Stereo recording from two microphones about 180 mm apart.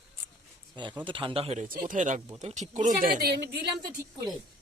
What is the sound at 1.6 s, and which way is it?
Speech, 50° right (ahead or behind).